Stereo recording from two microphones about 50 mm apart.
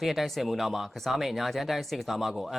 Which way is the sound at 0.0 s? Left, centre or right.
Centre.